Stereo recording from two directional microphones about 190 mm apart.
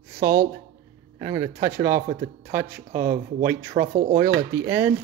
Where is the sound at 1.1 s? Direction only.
15° right (ahead or behind).